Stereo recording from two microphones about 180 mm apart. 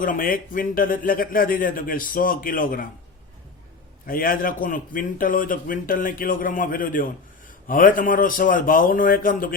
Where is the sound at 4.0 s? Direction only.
50° left (ahead or behind).